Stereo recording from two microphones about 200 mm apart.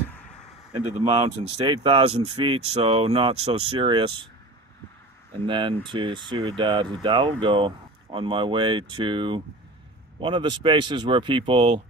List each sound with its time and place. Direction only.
0.9 s speech: 30° right (ahead or behind)
5.4 s speech: 25° right (ahead or behind)